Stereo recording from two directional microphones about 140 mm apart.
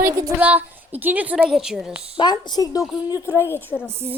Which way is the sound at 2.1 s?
30° left (ahead or behind).